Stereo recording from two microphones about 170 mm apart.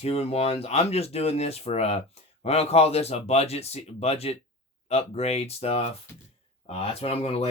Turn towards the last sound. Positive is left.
turn(degrees=35)  # may be behind; listen again after turning